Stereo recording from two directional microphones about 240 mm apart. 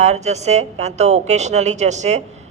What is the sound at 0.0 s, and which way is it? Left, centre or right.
A woman's voice, right.